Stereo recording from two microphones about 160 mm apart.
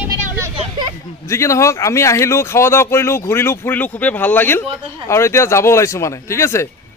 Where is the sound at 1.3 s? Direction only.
20° left (ahead or behind).